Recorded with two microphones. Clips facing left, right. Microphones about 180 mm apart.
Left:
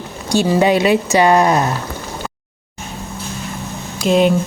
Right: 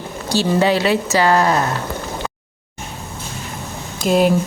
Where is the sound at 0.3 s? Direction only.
10° left (ahead or behind).